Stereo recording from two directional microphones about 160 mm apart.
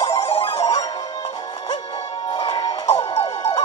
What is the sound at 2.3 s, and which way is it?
Music, 30° left (ahead or behind).